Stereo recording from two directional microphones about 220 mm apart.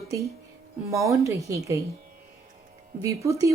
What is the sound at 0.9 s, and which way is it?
Speech, 15° right (ahead or behind).